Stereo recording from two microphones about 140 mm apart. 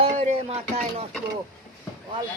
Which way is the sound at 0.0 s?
50° right (ahead or behind).